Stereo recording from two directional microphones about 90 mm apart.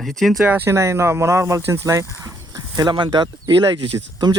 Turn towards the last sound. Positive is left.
turn(degrees=-50)  # may be behind; listen again after turning